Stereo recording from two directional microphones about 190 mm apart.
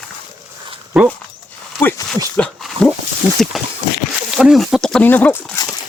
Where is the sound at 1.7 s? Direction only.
Centre (ahead or behind).